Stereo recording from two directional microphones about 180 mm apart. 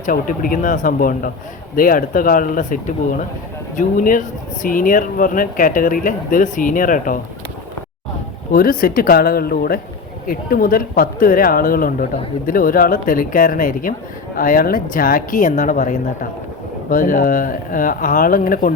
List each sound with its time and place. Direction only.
0.0 s speech: 50° left (ahead or behind)
8.5 s speech: 50° left (ahead or behind)